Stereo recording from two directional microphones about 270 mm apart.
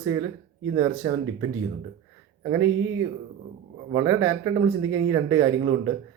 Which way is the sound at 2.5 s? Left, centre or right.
Right.